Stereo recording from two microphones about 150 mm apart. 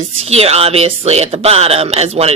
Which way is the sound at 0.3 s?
45° right (ahead or behind).